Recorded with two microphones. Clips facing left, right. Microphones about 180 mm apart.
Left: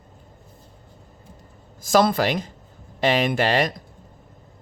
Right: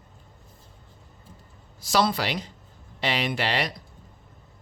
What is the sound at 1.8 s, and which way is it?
Speech, 50° left (ahead or behind).